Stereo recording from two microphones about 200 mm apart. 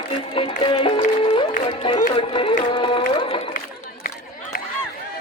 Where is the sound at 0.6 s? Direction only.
25° left (ahead or behind).